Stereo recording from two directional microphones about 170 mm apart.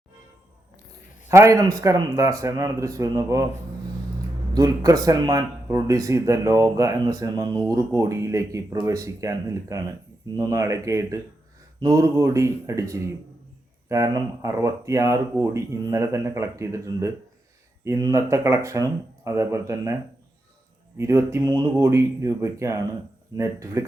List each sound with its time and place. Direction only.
1.3 s speech: 15° right (ahead or behind)
4.5 s speech: 20° right (ahead or behind)
21.0 s speech: 15° right (ahead or behind)